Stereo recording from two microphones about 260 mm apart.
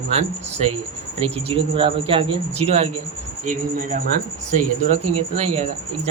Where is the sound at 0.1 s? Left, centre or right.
Right.